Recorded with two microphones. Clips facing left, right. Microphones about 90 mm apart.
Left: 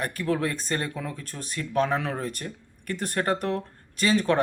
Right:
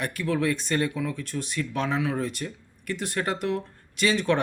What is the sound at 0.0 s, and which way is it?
Speech, 40° left (ahead or behind).